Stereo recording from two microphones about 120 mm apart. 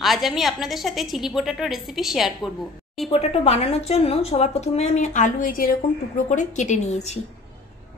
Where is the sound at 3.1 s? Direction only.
60° left (ahead or behind); by 7.2 s 80° left.